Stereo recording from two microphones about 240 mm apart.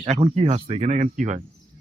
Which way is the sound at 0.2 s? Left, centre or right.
Right.